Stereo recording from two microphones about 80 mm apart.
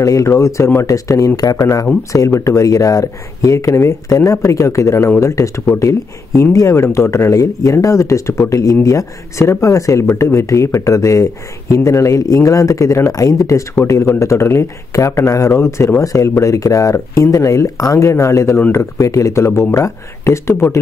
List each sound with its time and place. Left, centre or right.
0.0 s speech: left